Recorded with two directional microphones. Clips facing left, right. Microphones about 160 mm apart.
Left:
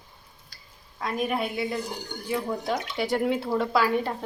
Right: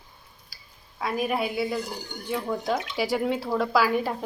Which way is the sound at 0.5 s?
5° right (ahead or behind).